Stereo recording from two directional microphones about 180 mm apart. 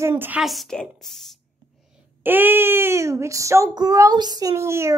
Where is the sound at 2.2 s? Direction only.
10° right (ahead or behind).